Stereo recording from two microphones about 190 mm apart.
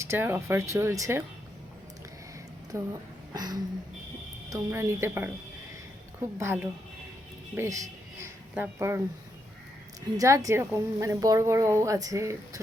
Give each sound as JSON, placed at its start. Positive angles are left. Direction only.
{"t": 0.0, "sound": "a woman's voice", "side_deg": -10}
{"t": 2.7, "sound": "a woman's voice", "side_deg": -15}
{"t": 6.4, "sound": "a woman's voice", "side_deg": -10}
{"t": 7.5, "sound": "a sound", "side_deg": -15}
{"t": 8.5, "sound": "a woman's voice", "side_deg": -10}
{"t": 10.2, "sound": "a woman's voice", "side_deg": -15}